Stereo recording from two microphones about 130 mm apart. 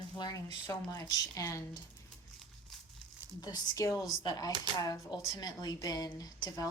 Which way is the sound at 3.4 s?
30° left (ahead or behind).